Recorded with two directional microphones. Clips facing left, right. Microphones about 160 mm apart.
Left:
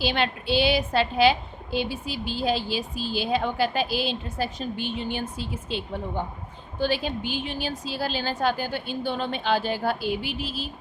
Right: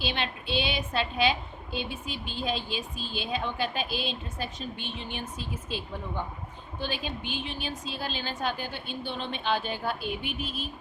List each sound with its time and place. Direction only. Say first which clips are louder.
0.2 s a woman's voice: left 7 dB; 35° left (ahead or behind)